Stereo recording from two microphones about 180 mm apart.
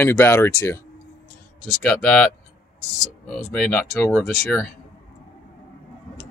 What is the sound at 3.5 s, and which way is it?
Speech, 5° left (ahead or behind).